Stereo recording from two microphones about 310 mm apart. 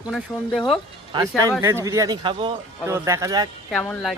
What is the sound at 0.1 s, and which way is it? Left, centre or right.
Speech, centre.